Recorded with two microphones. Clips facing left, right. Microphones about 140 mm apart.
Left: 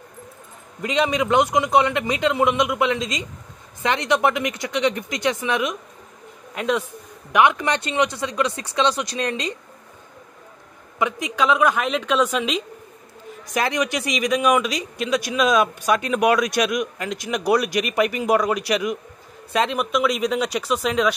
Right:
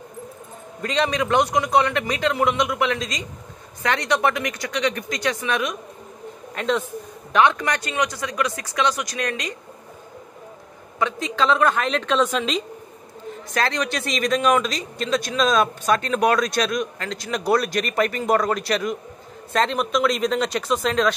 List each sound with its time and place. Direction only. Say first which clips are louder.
0.8 s a man's voice: left 1 dB; 15° left (ahead or behind)
6.5 s speech: even; 10° left (ahead or behind)
7.3 s a man's voice: left 1 dB; 20° left (ahead or behind)
11.0 s speech: even; 15° left (ahead or behind)
13.5 s speech: left 2 dB; 15° left (ahead or behind)